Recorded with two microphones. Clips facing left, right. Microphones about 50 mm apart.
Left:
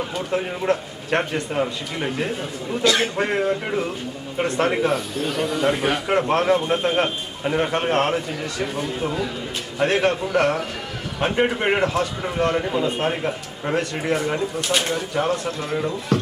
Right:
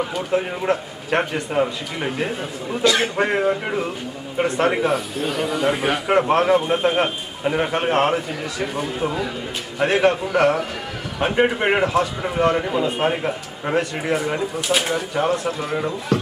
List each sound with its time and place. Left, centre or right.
0.0 s a man's voice: centre